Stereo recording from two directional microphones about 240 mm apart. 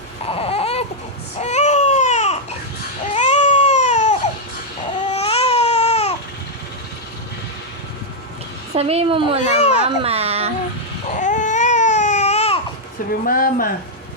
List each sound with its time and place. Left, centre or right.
0.3 s a sound: left
1.4 s baby cry: left
8.7 s a woman's voice: right
9.4 s a child's voice: left
10.0 s speech: right
11.1 s baby cry: left
13.2 s speech: left